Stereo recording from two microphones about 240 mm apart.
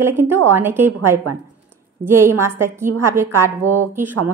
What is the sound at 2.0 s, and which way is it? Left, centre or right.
A woman's voice, centre.